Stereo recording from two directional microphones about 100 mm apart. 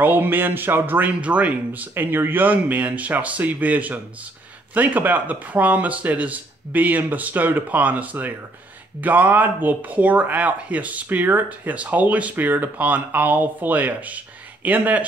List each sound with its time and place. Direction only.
0.0 s speech: 20° right (ahead or behind)